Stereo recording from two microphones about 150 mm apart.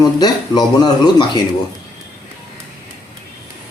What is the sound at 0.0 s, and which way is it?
Speech, 25° left (ahead or behind).